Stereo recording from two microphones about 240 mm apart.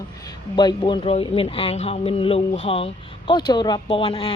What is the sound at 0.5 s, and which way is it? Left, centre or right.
Speech, centre.